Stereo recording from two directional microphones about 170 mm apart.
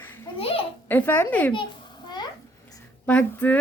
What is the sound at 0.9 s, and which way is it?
Speech, 10° left (ahead or behind).